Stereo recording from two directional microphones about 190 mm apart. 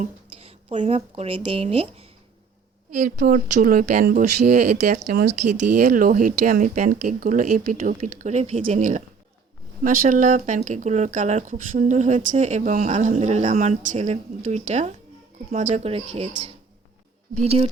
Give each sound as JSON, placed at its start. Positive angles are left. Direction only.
{"t": 0.3, "sound": "speech", "side_deg": -35}
{"t": 2.9, "sound": "speech", "side_deg": -45}
{"t": 4.4, "sound": "speech", "side_deg": -55}
{"t": 5.5, "sound": "speech", "side_deg": -40}